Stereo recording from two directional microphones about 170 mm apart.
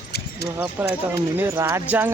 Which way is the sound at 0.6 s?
10° right (ahead or behind).